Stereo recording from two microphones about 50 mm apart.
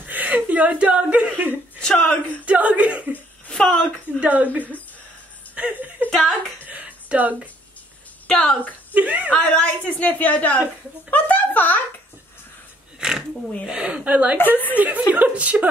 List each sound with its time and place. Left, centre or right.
0.0 s speech: right
1.8 s speech: centre
2.4 s speech: right
3.4 s speech: centre
4.2 s speech: right
5.5 s chuckle: right
6.6 s a sound: right
8.3 s a woman's voice: centre
8.9 s speech: right
9.3 s a woman's voice: left
13.0 s a woman's voice: centre
14.0 s a woman's voice: right